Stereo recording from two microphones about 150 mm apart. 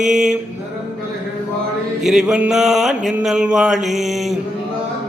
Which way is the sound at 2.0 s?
5° right (ahead or behind).